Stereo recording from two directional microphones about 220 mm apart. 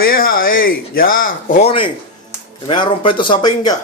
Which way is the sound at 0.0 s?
40° left (ahead or behind).